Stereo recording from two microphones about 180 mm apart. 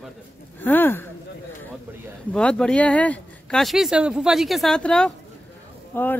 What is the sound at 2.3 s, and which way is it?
A woman's voice, 5° left (ahead or behind).